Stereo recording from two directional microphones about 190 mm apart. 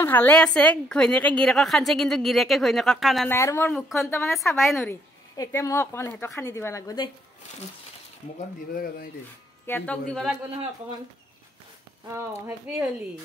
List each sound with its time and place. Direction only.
0.0 s a woman's voice: 10° left (ahead or behind)
3.3 s a woman's voice: 15° left (ahead or behind)
3.7 s a woman's voice: centre (ahead or behind)
5.3 s a woman's voice: 15° left (ahead or behind)
8.7 s speech: 50° left (ahead or behind)
9.7 s a woman's voice: 10° left (ahead or behind)
12.1 s speech: 15° right (ahead or behind)